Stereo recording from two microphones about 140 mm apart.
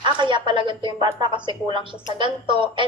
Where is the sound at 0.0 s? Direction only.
35° right (ahead or behind).